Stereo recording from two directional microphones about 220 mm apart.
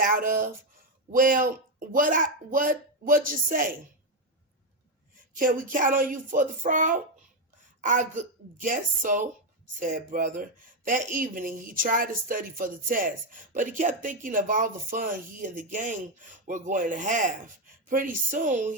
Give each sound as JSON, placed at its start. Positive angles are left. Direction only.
{"t": 0.0, "sound": "speech", "side_deg": -40}
{"t": 5.3, "sound": "speech", "side_deg": -40}